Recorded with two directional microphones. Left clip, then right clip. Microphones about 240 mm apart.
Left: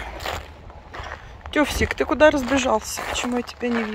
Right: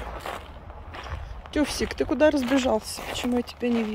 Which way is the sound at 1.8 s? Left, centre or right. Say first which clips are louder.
Left 5 dB; centre.